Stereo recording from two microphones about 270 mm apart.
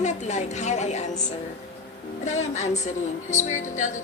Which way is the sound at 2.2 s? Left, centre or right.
Left.